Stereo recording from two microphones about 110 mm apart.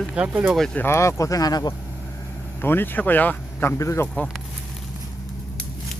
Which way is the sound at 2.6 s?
20° left (ahead or behind).